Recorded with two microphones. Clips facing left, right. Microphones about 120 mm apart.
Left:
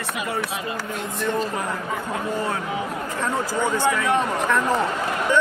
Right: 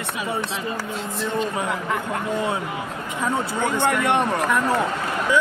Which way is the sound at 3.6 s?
60° right (ahead or behind).